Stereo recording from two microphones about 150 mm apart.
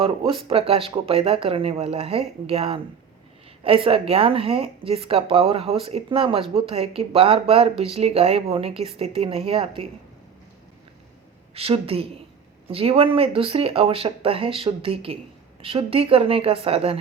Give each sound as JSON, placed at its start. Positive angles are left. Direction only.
{"t": 0.0, "sound": "speech", "side_deg": -35}
{"t": 11.5, "sound": "speech", "side_deg": -40}